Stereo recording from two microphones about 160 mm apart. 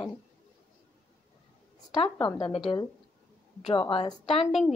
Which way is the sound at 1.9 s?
30° left (ahead or behind).